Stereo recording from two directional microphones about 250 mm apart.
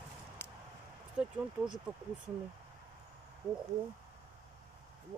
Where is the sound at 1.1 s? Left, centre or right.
Centre.